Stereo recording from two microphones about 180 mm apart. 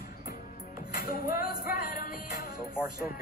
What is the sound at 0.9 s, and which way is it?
Music, 55° left (ahead or behind).